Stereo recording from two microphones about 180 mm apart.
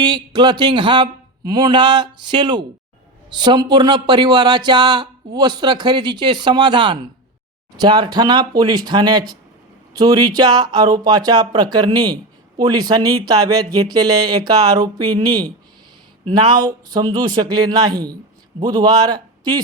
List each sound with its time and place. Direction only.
0.0 s speech: 25° right (ahead or behind)